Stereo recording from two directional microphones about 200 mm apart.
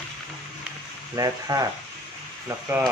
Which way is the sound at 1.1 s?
15° right (ahead or behind).